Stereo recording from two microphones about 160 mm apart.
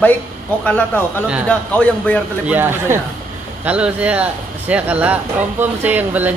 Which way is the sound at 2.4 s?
10° right (ahead or behind).